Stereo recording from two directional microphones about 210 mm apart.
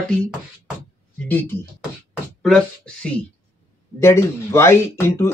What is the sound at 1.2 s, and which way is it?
Speech, 10° left (ahead or behind).